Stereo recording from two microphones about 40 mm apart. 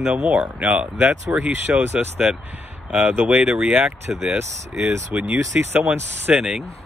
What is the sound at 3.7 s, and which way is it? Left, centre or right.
Speech, right.